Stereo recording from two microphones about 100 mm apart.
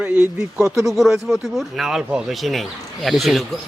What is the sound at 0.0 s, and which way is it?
Speech, 10° right (ahead or behind).